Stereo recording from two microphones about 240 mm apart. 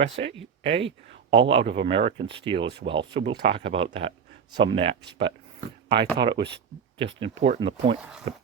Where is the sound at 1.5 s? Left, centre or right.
Right.